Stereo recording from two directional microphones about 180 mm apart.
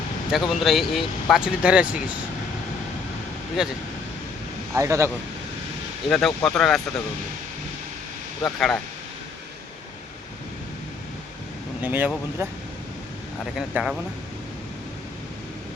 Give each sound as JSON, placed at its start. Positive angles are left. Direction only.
{"t": 0.3, "sound": "speech", "side_deg": 0}
{"t": 3.6, "sound": "speech", "side_deg": -5}
{"t": 4.7, "sound": "speech", "side_deg": -15}
{"t": 6.1, "sound": "speech", "side_deg": 5}
{"t": 8.5, "sound": "speech", "side_deg": 0}
{"t": 11.8, "sound": "speech", "side_deg": -10}